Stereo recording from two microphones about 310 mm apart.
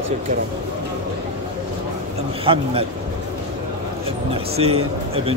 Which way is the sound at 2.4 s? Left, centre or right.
Centre.